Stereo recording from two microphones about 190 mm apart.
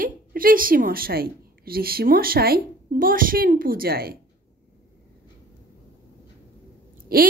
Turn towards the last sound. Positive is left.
turn(degrees=-50)  # may be behind; listen again after turning